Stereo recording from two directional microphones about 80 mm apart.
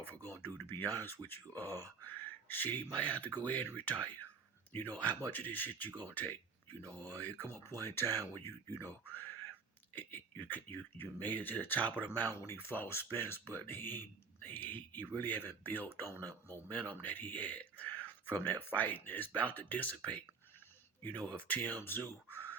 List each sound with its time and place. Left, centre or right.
0.4 s speech: left
6.9 s speech: left
22.3 s crow: left